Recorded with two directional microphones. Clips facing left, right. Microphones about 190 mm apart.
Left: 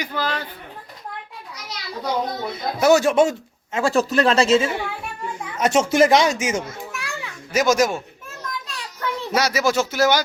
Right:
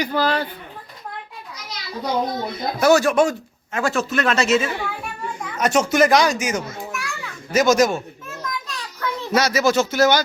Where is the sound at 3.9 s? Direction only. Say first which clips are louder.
Left 5 dB; 35° left (ahead or behind).